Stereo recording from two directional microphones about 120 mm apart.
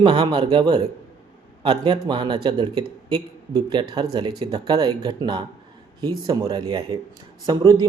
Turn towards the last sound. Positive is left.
turn(degrees=-40)  # may be behind; listen again after turning